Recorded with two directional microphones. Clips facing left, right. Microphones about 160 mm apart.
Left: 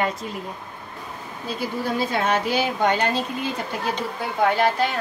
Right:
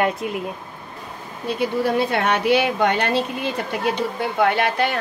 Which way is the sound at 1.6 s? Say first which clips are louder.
Right 5 dB; 65° right (ahead or behind).